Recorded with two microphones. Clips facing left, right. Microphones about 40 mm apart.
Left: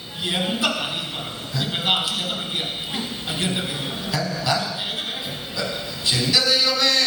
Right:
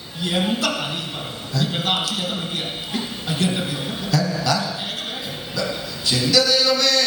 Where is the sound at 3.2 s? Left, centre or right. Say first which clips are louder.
Right 4 dB; centre.